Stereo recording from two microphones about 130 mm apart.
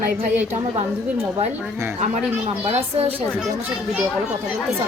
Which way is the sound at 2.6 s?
50° right (ahead or behind).